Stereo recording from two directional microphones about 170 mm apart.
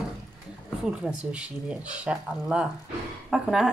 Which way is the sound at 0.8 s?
5° right (ahead or behind).